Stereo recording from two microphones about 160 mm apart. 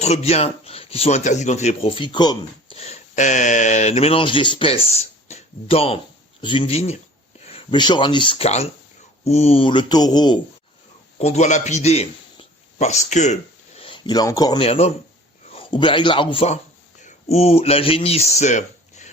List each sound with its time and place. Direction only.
0.0 s speech: 40° left (ahead or behind)
2.7 s speech: 40° left (ahead or behind)
11.2 s a man's voice: 45° left (ahead or behind); by 14.6 s 25° left (ahead or behind)
14.6 s a man's voice: 40° left (ahead or behind)